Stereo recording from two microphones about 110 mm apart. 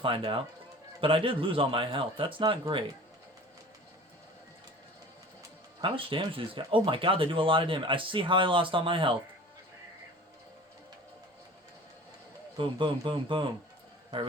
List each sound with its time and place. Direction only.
0.0 s speech: 50° right (ahead or behind)
5.8 s speech: 55° right (ahead or behind)
12.5 s speech: 50° right (ahead or behind)